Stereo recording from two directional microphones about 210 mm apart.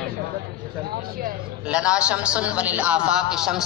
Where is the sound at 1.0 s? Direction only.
45° right (ahead or behind).